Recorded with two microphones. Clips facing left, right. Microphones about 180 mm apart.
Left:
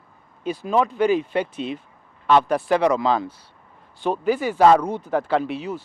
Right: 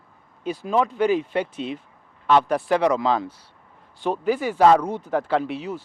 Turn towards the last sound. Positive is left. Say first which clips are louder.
# left 1 dB
turn(degrees=10)  # may be behind; listen again after turning